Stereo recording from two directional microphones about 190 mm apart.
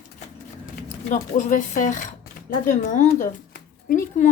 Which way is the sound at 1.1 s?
40° left (ahead or behind).